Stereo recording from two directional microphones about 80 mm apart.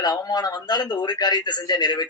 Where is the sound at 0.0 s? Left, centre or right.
Left.